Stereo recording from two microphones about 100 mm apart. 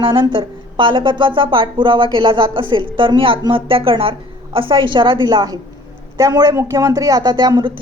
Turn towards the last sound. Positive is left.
turn(degrees=-40)  # may be behind; listen again after turning